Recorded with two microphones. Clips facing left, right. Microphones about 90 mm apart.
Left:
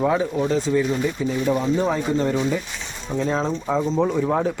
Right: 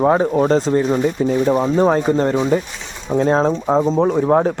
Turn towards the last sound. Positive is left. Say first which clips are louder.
# right 6 dB
turn(degrees=-40)  # may be behind; listen again after turning